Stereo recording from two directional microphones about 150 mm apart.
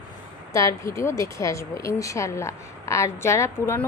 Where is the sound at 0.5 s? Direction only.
20° left (ahead or behind).